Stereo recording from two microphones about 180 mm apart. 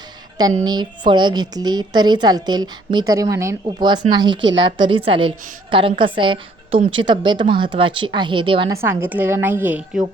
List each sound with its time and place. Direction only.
0.6 s a woman's voice: 25° right (ahead or behind)
4.4 s a woman's voice: 90° right
4.9 s a woman's voice: 30° right (ahead or behind)
8.7 s a woman's voice: 15° right (ahead or behind)